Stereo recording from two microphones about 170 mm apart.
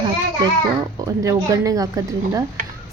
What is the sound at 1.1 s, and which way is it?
A woman's voice, 20° right (ahead or behind).